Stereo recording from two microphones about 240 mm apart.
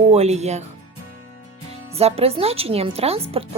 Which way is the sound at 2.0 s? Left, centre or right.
Right.